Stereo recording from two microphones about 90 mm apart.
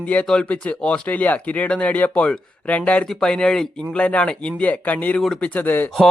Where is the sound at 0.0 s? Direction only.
15° left (ahead or behind).